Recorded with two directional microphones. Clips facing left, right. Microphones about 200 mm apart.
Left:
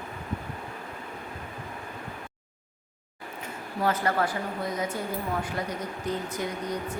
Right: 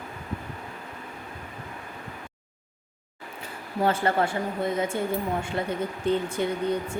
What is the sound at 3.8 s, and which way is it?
Speech, 30° right (ahead or behind).